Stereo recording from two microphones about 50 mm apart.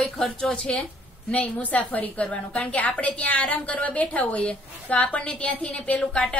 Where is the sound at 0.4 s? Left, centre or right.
Left.